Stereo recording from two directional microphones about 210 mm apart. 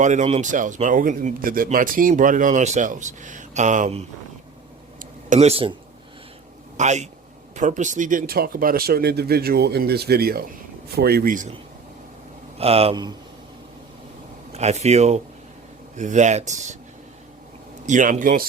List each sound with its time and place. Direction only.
0.0 s speech: 35° right (ahead or behind)
5.3 s speech: 30° right (ahead or behind)
6.7 s speech: 35° right (ahead or behind)
12.5 s speech: 30° right (ahead or behind)
14.5 s speech: 30° right (ahead or behind)
17.8 s speech: 35° right (ahead or behind)